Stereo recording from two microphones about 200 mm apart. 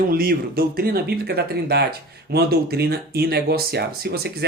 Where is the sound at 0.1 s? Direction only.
50° right (ahead or behind).